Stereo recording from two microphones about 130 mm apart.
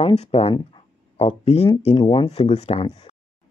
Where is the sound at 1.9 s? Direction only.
35° left (ahead or behind).